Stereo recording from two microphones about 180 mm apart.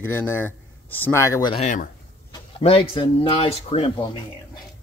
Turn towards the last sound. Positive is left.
turn(degrees=30)  # may be behind; listen again after turning